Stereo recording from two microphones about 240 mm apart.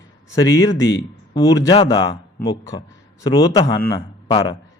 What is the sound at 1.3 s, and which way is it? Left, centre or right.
Speech, left.